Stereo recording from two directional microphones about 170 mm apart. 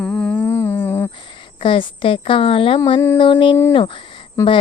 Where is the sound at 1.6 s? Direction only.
30° left (ahead or behind).